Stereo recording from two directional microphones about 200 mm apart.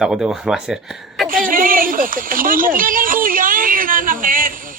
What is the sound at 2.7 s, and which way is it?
Speech, 45° right (ahead or behind).